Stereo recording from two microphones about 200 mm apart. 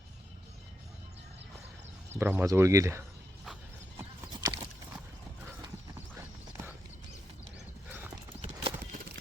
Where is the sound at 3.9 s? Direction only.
20° right (ahead or behind).